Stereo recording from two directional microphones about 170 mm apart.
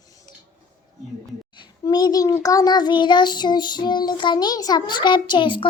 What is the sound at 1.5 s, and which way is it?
A child's voice, 25° left (ahead or behind).